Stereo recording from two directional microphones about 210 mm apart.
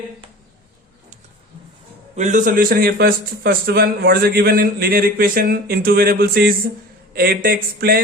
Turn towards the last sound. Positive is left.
turn(degrees=-45)  # may be behind; listen again after turning